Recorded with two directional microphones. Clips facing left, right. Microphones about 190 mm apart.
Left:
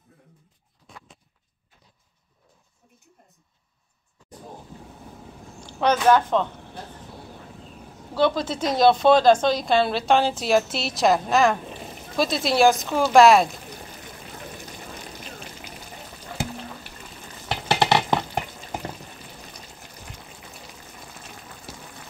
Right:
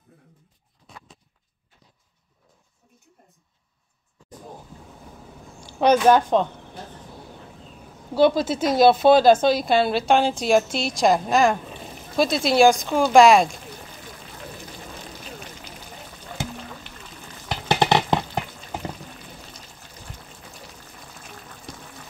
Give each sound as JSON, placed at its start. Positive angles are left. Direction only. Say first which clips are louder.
{"t": 5.7, "sound": "speech", "louder": "right 2 dB", "side_deg": -15}
{"t": 8.1, "sound": "a woman's voice", "louder": "right 4 dB", "side_deg": -10}
{"t": 17.6, "sound": "music", "louder": "right 1 dB", "side_deg": -20}
{"t": 21.7, "sound": "boiling", "louder": "right 2 dB", "side_deg": 5}